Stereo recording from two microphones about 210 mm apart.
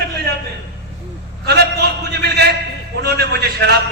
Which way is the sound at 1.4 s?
50° right (ahead or behind).